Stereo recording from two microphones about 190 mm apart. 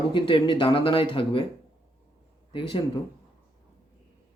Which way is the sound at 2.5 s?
25° left (ahead or behind).